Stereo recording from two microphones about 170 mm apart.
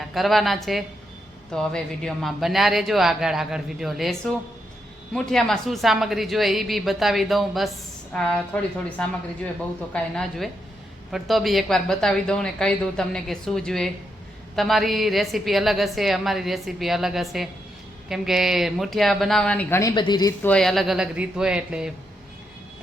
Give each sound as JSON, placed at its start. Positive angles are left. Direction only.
{"t": 0.1, "sound": "a woman's voice", "side_deg": 0}
{"t": 19.8, "sound": "a woman's voice", "side_deg": 25}
{"t": 20.4, "sound": "a woman's voice", "side_deg": 5}